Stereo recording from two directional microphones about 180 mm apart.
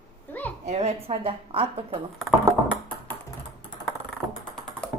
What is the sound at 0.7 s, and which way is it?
Giggle, 35° right (ahead or behind).